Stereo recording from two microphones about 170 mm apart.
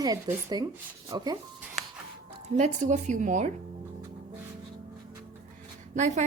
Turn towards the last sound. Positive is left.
turn(degrees=-45)  # may be behind; listen again after turning